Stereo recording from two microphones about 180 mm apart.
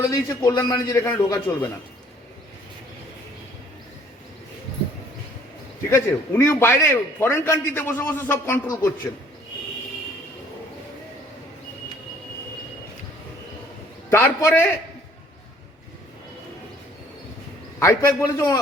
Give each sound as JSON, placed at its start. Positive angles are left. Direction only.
{"t": 0.1, "sound": "a man's voice", "side_deg": 20}
{"t": 5.9, "sound": "a man's voice", "side_deg": 15}
{"t": 14.1, "sound": "a man's voice", "side_deg": 15}
{"t": 17.7, "sound": "a man's voice", "side_deg": 15}